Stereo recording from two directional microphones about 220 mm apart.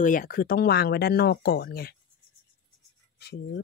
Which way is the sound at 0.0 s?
40° left (ahead or behind).